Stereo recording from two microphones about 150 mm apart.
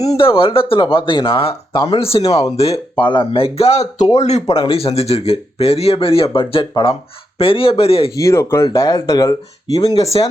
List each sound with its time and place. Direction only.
0.0 s speech: 40° left (ahead or behind)
2.9 s speech: 30° left (ahead or behind)
8.1 s speech: 20° left (ahead or behind)